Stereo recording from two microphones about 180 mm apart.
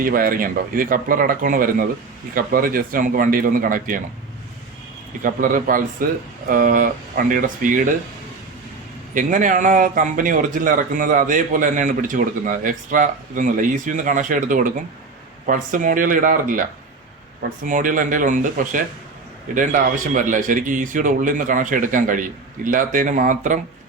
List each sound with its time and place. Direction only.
0.0 s speech: 50° right (ahead or behind)
5.2 s speech: 50° right (ahead or behind)
9.1 s speech: 45° right (ahead or behind)